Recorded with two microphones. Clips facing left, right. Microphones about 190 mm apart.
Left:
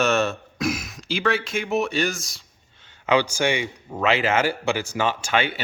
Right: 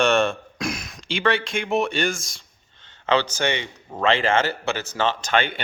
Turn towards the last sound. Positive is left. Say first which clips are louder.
# right 1 dB
turn(degrees=10)  # may be behind; listen again after turning